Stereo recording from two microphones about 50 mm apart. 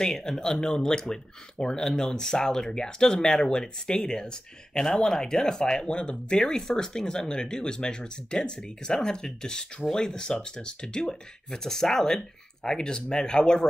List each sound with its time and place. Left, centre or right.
0.0 s speech: centre